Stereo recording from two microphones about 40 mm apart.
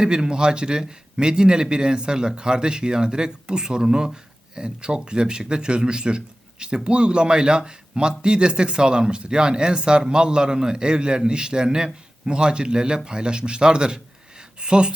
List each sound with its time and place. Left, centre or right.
0.0 s a man's voice: right